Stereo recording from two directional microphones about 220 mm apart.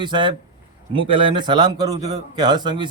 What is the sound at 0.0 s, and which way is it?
A man's voice, 20° right (ahead or behind).